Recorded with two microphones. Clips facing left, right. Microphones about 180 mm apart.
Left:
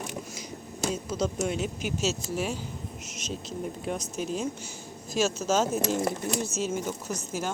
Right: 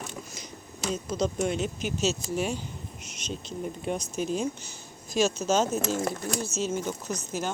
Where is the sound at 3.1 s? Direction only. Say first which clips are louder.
Right 1 dB; centre (ahead or behind).